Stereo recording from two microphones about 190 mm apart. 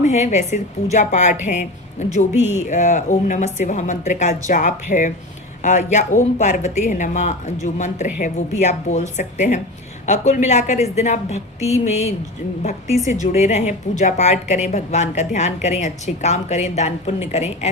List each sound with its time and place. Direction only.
0.0 s a woman's voice: 35° left (ahead or behind)
2.4 s speech: 10° right (ahead or behind)
2.6 s a woman's voice: 40° left (ahead or behind)
13.2 s a woman's voice: 35° left (ahead or behind)